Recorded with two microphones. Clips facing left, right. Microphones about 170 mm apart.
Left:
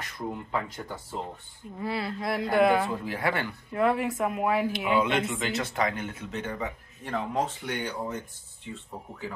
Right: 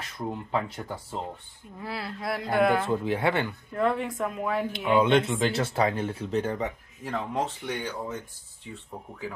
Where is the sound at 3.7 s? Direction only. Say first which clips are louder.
Left 1 dB; 5° left (ahead or behind).